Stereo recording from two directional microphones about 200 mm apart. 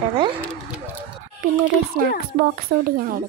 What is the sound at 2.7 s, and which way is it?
Speech, 50° right (ahead or behind).